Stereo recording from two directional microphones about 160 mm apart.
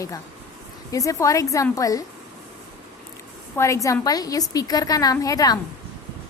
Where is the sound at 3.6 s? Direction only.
20° left (ahead or behind).